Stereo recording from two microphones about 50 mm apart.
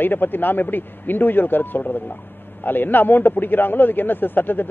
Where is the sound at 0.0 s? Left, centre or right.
Left.